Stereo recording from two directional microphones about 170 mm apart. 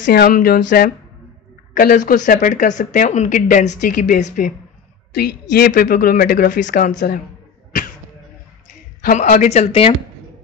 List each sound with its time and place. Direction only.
0.0 s speech: 60° left (ahead or behind)
5.1 s speech: 65° left (ahead or behind)
9.0 s speech: 50° left (ahead or behind)
9.7 s speech: 35° left (ahead or behind)